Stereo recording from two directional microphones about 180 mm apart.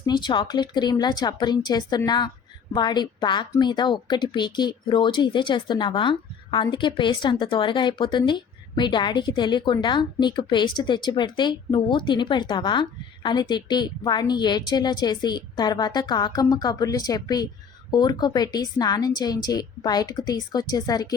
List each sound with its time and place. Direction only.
0.0 s a woman's voice: 25° left (ahead or behind)